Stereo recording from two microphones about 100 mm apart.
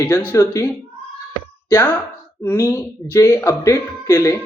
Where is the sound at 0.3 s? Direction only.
30° left (ahead or behind).